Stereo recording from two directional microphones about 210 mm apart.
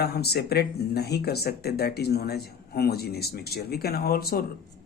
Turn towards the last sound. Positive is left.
turn(degrees=45)  # may be behind; listen again after turning